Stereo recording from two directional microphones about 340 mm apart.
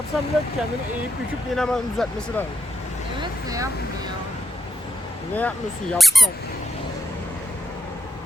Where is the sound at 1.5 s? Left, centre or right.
Centre.